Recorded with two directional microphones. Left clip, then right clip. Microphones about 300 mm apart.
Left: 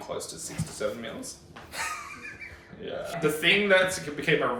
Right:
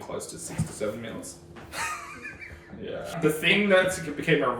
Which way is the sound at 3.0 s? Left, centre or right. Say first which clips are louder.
Even; centre.